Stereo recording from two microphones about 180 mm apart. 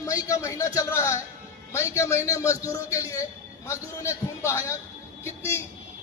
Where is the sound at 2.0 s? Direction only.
15° left (ahead or behind).